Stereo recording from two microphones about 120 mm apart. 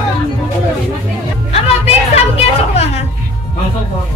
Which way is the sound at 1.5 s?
60° left (ahead or behind).